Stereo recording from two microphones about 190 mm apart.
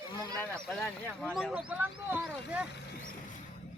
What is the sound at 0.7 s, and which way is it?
Speech, centre (ahead or behind).